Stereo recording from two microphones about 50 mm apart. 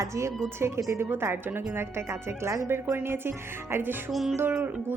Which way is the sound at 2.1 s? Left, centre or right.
Right.